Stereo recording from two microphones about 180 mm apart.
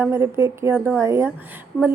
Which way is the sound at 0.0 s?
15° right (ahead or behind).